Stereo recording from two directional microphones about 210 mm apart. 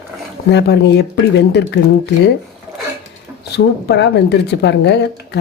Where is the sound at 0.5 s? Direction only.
55° left (ahead or behind).